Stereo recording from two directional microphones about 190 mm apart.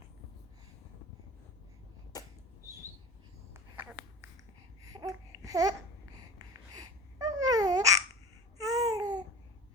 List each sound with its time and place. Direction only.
2.1 s a sound: 20° left (ahead or behind)
4.8 s babbling: 20° right (ahead or behind)
6.7 s babbling: 20° right (ahead or behind)